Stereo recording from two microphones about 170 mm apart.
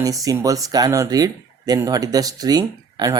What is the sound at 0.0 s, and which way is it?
Speech, 20° right (ahead or behind).